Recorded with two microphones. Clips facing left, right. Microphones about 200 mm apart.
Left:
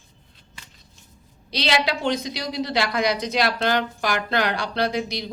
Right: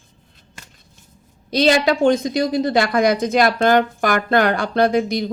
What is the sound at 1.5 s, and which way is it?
A woman's voice, 50° right (ahead or behind).